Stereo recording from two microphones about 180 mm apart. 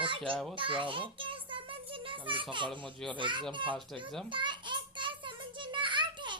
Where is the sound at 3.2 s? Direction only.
25° right (ahead or behind).